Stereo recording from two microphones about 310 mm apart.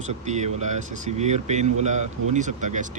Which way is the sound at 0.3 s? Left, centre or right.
Right.